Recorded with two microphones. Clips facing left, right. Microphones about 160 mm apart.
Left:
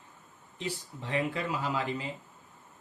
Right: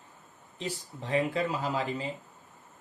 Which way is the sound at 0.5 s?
35° right (ahead or behind).